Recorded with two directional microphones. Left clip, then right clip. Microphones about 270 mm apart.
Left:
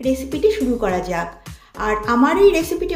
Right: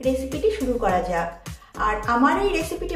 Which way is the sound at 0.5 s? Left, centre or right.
Left.